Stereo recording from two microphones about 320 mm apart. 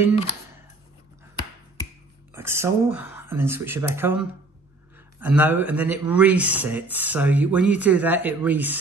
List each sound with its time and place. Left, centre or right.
2.3 s speech: centre